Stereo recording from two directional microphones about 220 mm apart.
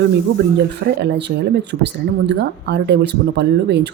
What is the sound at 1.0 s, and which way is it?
Speech, 50° right (ahead or behind).